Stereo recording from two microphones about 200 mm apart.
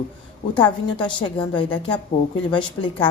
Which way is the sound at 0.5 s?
20° left (ahead or behind).